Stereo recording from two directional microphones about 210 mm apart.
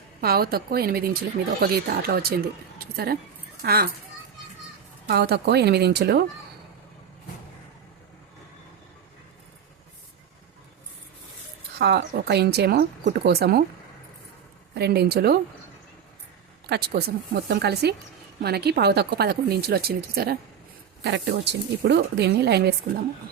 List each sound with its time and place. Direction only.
0.2 s speech: 45° right (ahead or behind)
5.0 s speech: 50° right (ahead or behind)
11.8 s speech: 50° right (ahead or behind)
14.8 s speech: 50° right (ahead or behind)
16.6 s speech: 50° right (ahead or behind)